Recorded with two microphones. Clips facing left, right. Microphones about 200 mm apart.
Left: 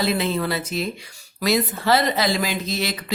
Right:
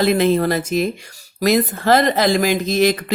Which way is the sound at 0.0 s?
50° right (ahead or behind).